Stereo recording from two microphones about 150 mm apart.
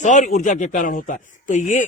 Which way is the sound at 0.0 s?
55° left (ahead or behind).